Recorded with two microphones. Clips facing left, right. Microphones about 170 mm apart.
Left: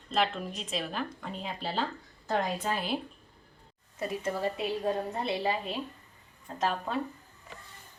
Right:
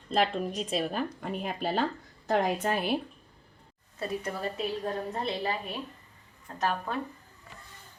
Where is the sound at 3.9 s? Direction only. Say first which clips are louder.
Left 1 dB; 15° left (ahead or behind).